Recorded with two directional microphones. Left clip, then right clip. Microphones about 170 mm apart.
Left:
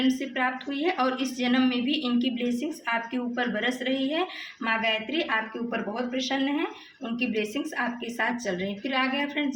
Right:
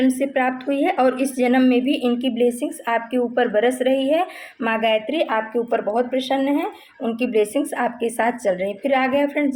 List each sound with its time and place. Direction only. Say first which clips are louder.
0.1 s a woman's voice: right 7 dB; 50° right (ahead or behind)